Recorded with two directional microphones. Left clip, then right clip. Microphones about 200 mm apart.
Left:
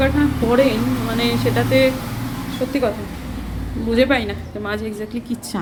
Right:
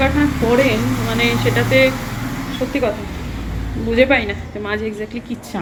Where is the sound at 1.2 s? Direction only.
Centre (ahead or behind).